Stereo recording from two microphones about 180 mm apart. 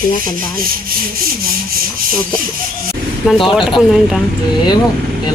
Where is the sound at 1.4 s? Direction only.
55° right (ahead or behind).